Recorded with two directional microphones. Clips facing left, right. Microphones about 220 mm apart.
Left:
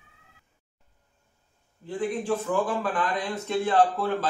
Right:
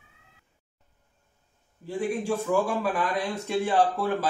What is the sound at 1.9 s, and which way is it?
A man's voice, 10° right (ahead or behind).